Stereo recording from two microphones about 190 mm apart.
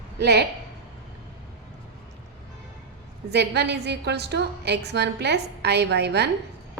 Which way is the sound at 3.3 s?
60° right (ahead or behind).